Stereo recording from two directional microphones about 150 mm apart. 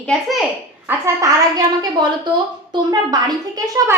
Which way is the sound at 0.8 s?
20° right (ahead or behind).